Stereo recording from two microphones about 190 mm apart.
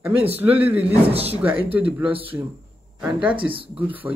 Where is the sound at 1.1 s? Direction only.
30° right (ahead or behind).